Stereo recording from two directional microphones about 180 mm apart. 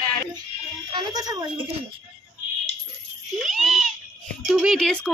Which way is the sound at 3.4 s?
Centre (ahead or behind).